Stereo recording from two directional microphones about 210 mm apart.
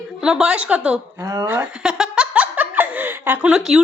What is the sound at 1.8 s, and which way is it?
Giggle, 5° right (ahead or behind).